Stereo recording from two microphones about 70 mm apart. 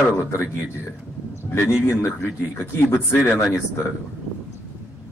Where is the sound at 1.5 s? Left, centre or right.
Left.